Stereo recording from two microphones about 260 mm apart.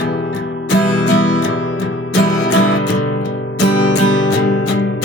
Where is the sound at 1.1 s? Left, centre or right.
Left.